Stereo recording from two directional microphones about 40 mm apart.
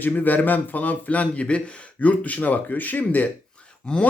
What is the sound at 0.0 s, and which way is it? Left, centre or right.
A man's voice, left.